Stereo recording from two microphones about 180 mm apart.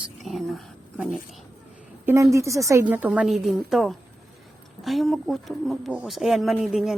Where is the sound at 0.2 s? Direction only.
Centre (ahead or behind).